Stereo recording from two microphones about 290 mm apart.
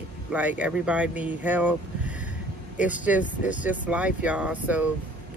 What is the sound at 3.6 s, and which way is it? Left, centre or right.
Speech, centre.